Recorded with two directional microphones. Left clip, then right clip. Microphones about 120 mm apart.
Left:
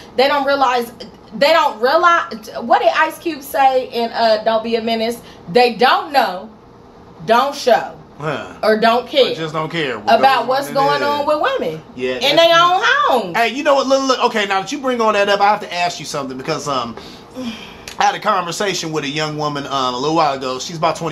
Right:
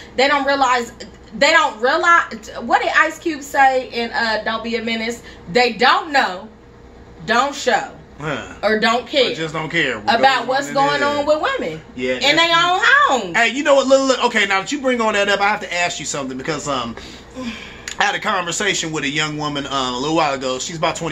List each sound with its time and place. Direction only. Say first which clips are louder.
0.1 s a woman's voice: left 1 dB; 20° left (ahead or behind)
7.2 s a woman's voice: left 4 dB; 20° left (ahead or behind)
8.2 s speech: left 2 dB; 5° left (ahead or behind)
8.5 s a man's voice: left 3 dB; 20° left (ahead or behind)
10.0 s a woman's voice: left 4 dB; 20° left (ahead or behind)
13.3 s a man's voice: even; 5° left (ahead or behind)